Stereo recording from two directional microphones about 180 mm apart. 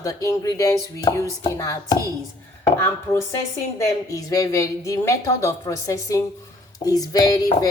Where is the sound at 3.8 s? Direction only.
20° left (ahead or behind).